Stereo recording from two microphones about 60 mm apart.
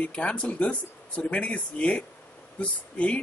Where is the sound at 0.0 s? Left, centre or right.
Centre.